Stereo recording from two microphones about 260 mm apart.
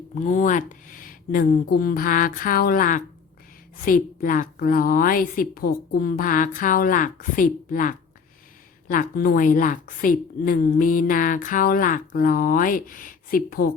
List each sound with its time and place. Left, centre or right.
0.1 s a woman's voice: left